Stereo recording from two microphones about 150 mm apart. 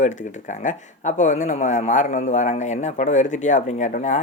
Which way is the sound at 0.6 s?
55° left (ahead or behind).